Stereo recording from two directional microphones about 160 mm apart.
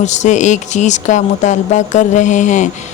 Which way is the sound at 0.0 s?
45° left (ahead or behind).